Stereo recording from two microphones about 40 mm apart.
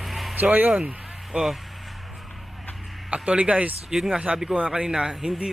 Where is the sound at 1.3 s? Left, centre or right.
Centre.